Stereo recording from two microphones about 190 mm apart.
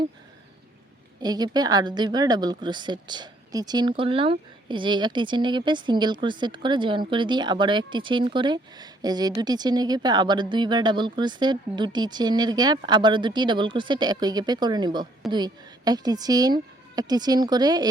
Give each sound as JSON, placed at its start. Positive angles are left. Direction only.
{"t": 1.2, "sound": "speech", "side_deg": -20}